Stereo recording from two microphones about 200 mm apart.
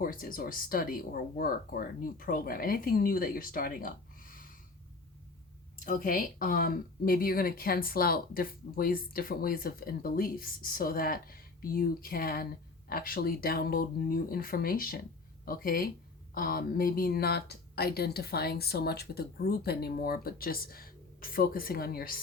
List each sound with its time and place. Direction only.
0.0 s speech: 45° left (ahead or behind)
5.8 s speech: 40° left (ahead or behind)